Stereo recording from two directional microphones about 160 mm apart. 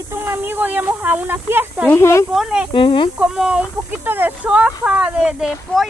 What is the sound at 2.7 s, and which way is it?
Speech, 30° left (ahead or behind).